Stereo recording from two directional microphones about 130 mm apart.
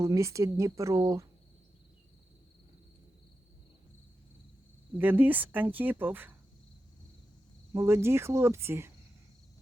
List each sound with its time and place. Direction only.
0.0 s cricket: 25° right (ahead or behind)
4.9 s speech: 15° right (ahead or behind)
7.7 s cricket: 20° right (ahead or behind)